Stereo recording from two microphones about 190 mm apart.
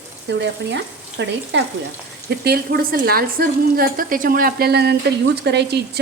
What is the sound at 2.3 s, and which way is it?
A woman's voice, 55° right (ahead or behind).